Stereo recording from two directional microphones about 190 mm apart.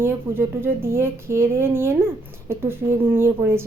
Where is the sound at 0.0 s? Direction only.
10° right (ahead or behind).